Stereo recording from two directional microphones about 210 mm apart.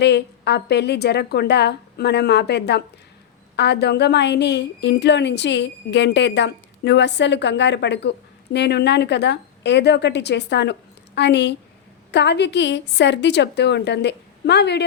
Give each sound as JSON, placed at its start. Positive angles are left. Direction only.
{"t": 0.0, "sound": "a woman's voice", "side_deg": 55}